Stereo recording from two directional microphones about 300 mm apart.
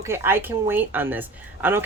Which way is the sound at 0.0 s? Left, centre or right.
Centre.